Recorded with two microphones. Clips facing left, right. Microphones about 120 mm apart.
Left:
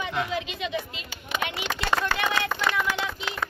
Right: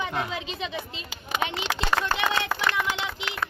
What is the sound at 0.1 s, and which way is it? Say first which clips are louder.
A woman's voice: left 2 dB; 30° right (ahead or behind).